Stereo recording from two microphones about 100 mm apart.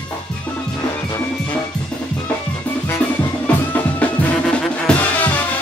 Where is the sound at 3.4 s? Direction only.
15° left (ahead or behind).